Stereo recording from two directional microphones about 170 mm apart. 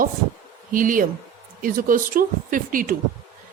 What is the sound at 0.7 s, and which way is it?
A woman's voice, 55° right (ahead or behind).